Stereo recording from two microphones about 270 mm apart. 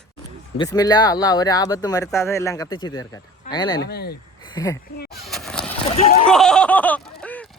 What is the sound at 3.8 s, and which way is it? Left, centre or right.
Speech, left.